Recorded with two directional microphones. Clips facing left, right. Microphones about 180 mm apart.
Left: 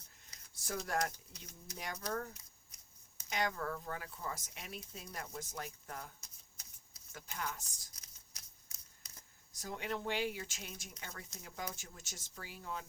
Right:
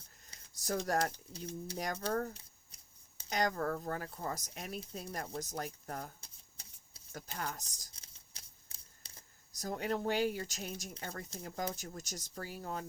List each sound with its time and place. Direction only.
0.3 s speech: 40° right (ahead or behind)